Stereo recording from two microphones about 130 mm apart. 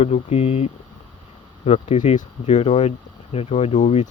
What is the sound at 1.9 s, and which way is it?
Speech, 65° left (ahead or behind).